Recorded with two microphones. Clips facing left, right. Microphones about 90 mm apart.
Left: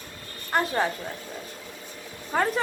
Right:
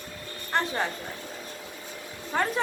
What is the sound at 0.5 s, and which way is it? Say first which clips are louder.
Speech: left 3 dB; 5° left (ahead or behind).